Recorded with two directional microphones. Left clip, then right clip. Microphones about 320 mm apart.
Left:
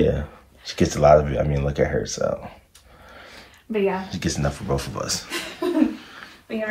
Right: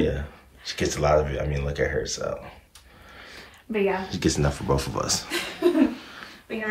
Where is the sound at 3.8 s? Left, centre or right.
Centre.